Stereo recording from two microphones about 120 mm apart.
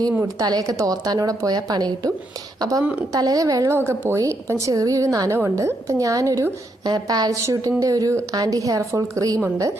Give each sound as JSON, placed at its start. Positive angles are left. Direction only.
{"t": 0.2, "sound": "a woman's voice", "side_deg": -30}